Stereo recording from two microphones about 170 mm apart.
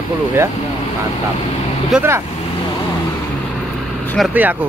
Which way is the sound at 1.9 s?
15° right (ahead or behind).